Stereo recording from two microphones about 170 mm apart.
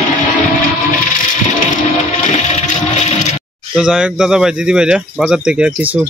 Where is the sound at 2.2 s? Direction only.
45° left (ahead or behind).